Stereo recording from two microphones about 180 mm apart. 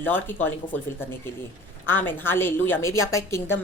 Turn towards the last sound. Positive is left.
turn(degrees=15)  # may be behind; listen again after turning